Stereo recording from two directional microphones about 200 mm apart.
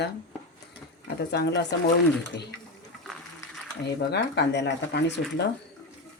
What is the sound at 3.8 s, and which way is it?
Speech, 55° left (ahead or behind).